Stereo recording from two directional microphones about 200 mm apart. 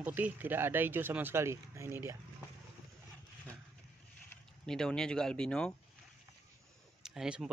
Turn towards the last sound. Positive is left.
turn(degrees=-5)  # may be behind; listen again after turning